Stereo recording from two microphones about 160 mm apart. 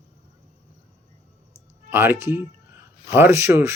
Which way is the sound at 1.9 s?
15° right (ahead or behind).